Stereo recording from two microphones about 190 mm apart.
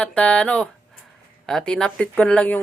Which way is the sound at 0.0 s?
5° left (ahead or behind).